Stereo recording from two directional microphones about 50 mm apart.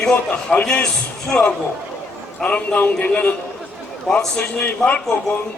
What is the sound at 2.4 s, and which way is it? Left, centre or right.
Speech, left.